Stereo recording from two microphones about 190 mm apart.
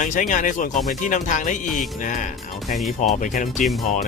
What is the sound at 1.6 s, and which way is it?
Music, centre (ahead or behind).